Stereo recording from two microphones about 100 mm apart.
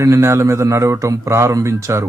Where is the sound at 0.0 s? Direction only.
30° right (ahead or behind).